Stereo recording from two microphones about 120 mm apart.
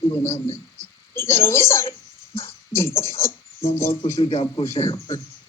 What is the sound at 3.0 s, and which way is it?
Speech, 20° left (ahead or behind).